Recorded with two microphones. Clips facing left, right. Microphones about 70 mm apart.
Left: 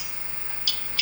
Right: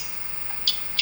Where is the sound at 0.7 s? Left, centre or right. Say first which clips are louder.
Right 2 dB; right.